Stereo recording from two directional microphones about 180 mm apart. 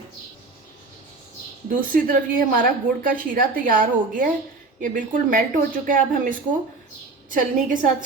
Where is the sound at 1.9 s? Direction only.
50° right (ahead or behind).